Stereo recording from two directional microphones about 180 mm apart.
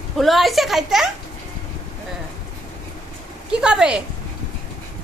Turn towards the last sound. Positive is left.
turn(degrees=-5)  # may be behind; listen again after turning